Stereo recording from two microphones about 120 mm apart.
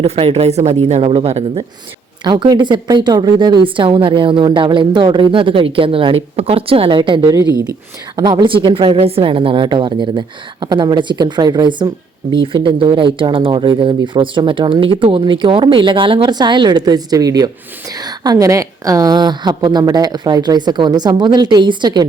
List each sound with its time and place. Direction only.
0.0 s speech: 55° right (ahead or behind)
2.2 s a woman's voice: 40° right (ahead or behind)